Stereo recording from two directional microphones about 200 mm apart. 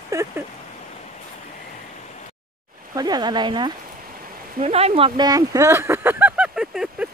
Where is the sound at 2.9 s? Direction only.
20° right (ahead or behind); by 7.1 s centre (ahead or behind).